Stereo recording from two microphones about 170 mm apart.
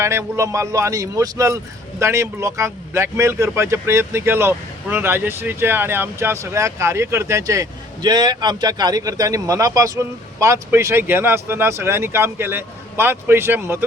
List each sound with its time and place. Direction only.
0.0 s a man's voice: 15° right (ahead or behind)